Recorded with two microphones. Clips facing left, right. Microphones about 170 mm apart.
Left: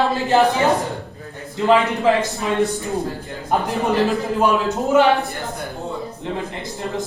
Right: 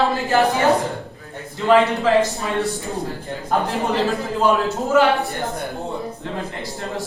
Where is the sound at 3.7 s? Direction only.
15° left (ahead or behind).